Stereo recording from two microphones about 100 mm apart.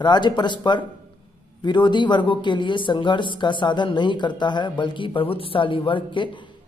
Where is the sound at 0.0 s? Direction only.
45° left (ahead or behind).